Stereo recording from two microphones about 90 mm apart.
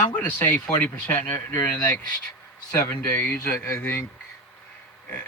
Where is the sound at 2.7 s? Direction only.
25° left (ahead or behind).